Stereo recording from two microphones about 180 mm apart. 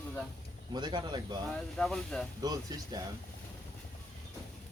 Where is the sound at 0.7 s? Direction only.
25° right (ahead or behind).